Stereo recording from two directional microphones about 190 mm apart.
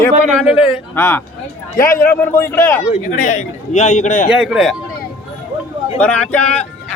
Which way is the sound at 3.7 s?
35° left (ahead or behind).